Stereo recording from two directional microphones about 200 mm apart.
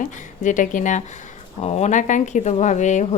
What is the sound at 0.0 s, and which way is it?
Speech, 40° left (ahead or behind).